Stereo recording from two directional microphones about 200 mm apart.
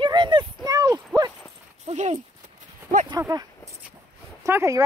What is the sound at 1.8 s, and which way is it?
Speech, 35° right (ahead or behind).